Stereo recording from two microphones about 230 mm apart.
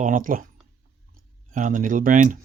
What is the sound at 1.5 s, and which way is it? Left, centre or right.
Speech, right.